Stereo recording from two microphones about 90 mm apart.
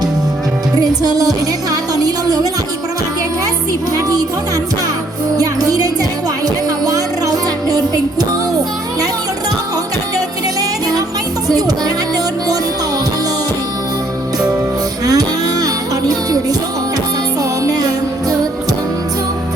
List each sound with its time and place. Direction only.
0.8 s music: 45° right (ahead or behind)
3.9 s music: 45° right (ahead or behind)
5.4 s music: 45° right (ahead or behind)
11.4 s music: 45° right (ahead or behind)
15.0 s music: 45° right (ahead or behind)
17.6 s music: 45° right (ahead or behind)